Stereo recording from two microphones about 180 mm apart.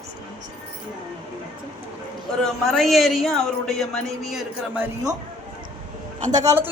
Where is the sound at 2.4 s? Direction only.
Centre (ahead or behind).